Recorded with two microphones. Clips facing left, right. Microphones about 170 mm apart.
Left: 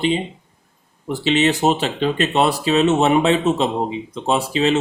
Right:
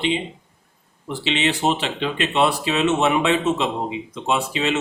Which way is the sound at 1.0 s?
40° left (ahead or behind).